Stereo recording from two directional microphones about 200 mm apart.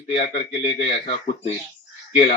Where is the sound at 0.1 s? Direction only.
25° left (ahead or behind).